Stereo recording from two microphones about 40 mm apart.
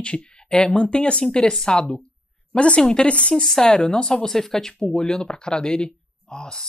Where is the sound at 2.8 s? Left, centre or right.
Centre.